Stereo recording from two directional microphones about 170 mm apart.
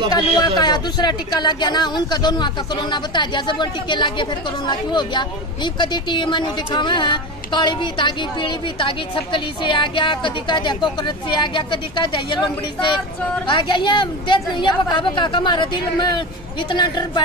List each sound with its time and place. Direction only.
0.1 s speech: 25° left (ahead or behind)
13.5 s speech: 30° left (ahead or behind)